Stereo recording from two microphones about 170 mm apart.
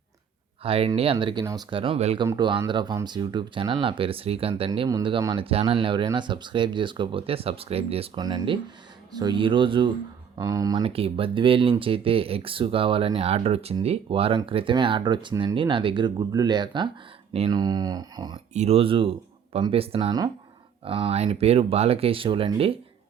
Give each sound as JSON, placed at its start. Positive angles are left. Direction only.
{"t": 0.6, "sound": "speech", "side_deg": -35}
{"t": 2.2, "sound": "speech", "side_deg": -25}
{"t": 8.2, "sound": "speech", "side_deg": -25}
{"t": 10.8, "sound": "speech", "side_deg": -35}
{"t": 17.6, "sound": "speech", "side_deg": -20}
{"t": 18.5, "sound": "speech", "side_deg": -40}